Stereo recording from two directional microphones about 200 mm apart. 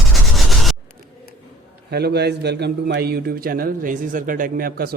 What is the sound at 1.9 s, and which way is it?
A man's voice, 55° right (ahead or behind).